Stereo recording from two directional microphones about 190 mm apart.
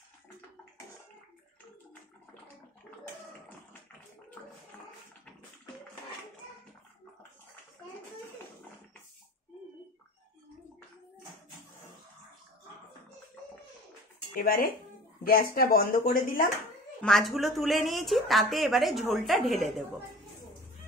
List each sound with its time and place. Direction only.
14.3 s speech: 50° left (ahead or behind)
17.0 s speech: centre (ahead or behind)